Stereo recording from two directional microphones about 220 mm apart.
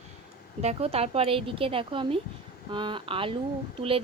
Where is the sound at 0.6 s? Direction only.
25° right (ahead or behind).